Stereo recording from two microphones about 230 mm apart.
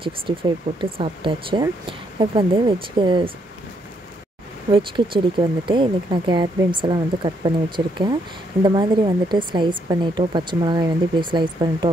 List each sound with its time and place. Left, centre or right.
0.0 s speech: right
4.7 s speech: right